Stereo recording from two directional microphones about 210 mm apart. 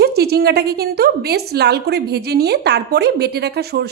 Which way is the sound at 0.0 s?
50° right (ahead or behind).